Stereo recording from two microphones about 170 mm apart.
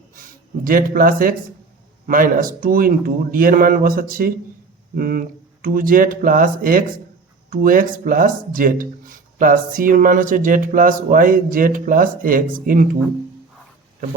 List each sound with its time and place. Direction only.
0.6 s speech: 55° right (ahead or behind)